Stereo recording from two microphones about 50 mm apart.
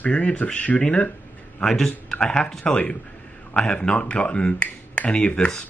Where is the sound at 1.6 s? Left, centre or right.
Centre.